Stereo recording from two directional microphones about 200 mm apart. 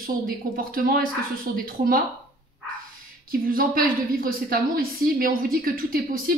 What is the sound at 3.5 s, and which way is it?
A woman's voice, 45° right (ahead or behind).